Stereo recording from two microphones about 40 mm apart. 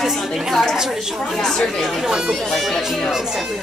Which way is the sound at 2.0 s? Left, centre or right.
Centre.